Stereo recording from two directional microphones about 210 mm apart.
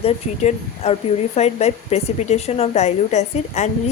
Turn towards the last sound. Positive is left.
turn(degrees=35)  # may be behind; listen again after turning